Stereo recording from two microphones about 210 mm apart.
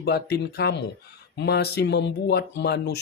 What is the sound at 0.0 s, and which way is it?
Speech, 50° left (ahead or behind).